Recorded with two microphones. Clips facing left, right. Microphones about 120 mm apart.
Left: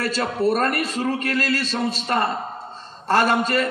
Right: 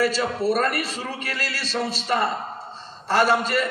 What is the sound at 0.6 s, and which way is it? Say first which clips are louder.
A man's voice: left 2 dB; 50° left (ahead or behind).